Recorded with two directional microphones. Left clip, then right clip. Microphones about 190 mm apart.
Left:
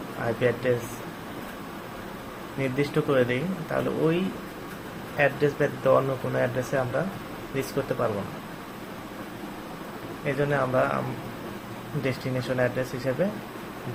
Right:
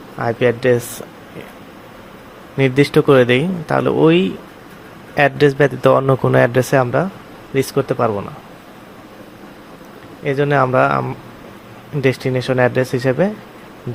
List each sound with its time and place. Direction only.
0.3 s speech: 60° right (ahead or behind)
2.6 s speech: 60° right (ahead or behind)
10.2 s speech: 55° right (ahead or behind)
12.0 s speech: 55° right (ahead or behind)